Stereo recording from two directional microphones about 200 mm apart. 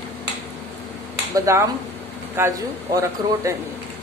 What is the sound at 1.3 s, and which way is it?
A man's voice, 15° right (ahead or behind).